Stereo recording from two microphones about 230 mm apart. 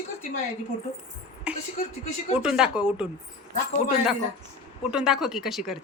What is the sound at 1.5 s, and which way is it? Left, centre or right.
Speech, centre.